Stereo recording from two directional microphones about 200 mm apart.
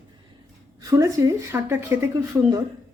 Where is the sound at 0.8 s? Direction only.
15° right (ahead or behind).